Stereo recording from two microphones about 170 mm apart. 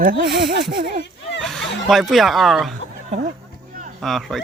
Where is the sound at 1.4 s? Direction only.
Centre (ahead or behind).